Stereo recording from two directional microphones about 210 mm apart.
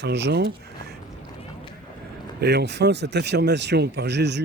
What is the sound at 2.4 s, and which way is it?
Speech, 50° right (ahead or behind).